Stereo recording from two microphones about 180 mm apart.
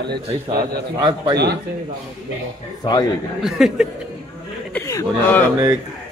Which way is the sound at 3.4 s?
Centre (ahead or behind).